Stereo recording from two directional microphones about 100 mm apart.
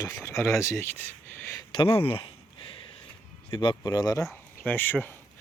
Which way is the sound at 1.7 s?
60° left (ahead or behind).